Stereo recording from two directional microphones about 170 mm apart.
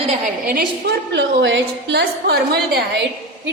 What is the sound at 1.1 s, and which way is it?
A woman's voice, 90° right.